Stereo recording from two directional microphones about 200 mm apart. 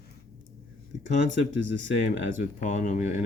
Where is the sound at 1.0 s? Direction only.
35° left (ahead or behind).